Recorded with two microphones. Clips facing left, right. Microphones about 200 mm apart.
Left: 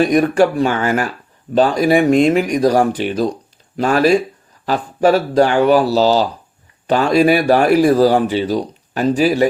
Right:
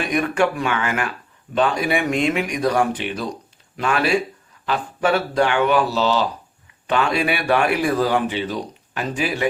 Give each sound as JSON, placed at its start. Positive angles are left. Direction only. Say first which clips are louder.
{"t": 0.0, "sound": "a man's voice", "louder": "left 7 dB", "side_deg": 35}